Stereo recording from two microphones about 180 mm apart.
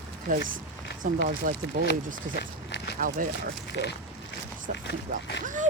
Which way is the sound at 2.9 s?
50° right (ahead or behind).